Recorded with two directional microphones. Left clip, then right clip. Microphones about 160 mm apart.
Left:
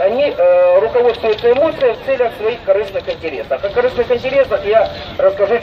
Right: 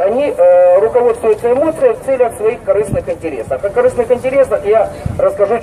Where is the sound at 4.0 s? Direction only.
15° left (ahead or behind).